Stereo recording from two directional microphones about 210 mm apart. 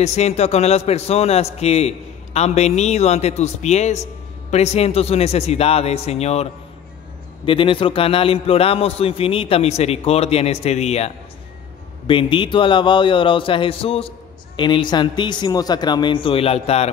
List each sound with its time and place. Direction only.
0.0 s a man's voice: 30° left (ahead or behind)
12.1 s a man's voice: 25° left (ahead or behind)